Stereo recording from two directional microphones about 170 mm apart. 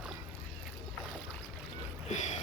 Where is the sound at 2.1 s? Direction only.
45° left (ahead or behind).